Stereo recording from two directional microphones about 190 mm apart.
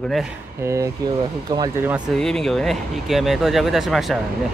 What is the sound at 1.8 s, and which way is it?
Speech, 10° right (ahead or behind).